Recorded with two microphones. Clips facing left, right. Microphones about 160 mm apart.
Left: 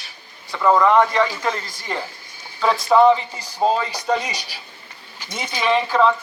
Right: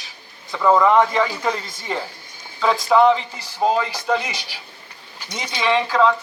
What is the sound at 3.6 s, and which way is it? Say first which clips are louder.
Speech: left 1 dB; 25° left (ahead or behind).